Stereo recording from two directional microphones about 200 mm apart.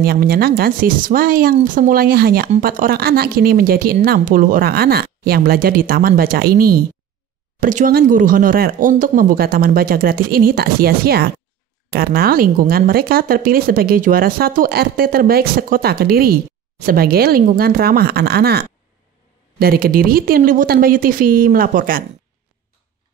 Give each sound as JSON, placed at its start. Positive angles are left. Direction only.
{"t": 0.0, "sound": "speech", "side_deg": -50}